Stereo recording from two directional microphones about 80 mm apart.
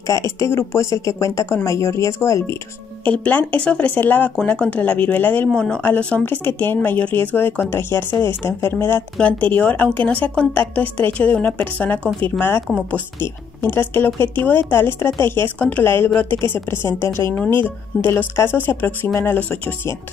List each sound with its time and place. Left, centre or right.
0.0 s speech: left
3.1 s speech: centre
5.5 s speech: centre; by 9.0 s left
9.2 s speech: centre